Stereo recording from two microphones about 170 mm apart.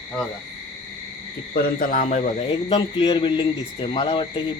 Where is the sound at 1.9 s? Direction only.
45° left (ahead or behind).